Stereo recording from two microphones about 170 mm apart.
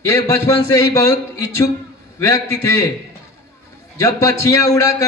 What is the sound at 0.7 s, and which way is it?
Speech, 20° left (ahead or behind).